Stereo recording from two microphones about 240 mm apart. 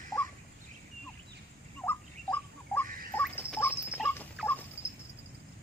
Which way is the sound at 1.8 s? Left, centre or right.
Centre.